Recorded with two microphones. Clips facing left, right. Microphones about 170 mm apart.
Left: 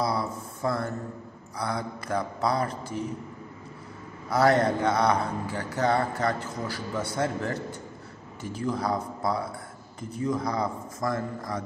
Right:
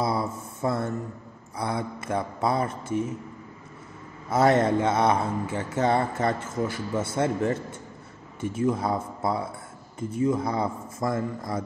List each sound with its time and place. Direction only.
0.0 s a sound: 25° right (ahead or behind)
1.6 s speech: 25° right (ahead or behind)
4.3 s speech: 25° right (ahead or behind)